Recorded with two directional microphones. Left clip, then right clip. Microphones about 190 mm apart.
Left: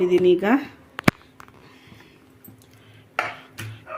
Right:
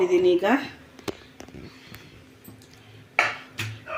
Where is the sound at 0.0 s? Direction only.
60° left (ahead or behind).